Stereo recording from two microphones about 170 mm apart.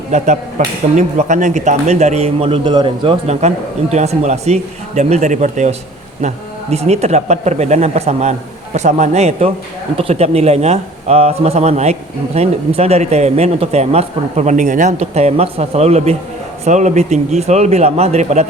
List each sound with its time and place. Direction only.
0.1 s speech: 40° right (ahead or behind)